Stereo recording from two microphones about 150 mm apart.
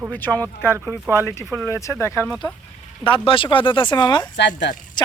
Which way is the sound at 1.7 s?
20° left (ahead or behind).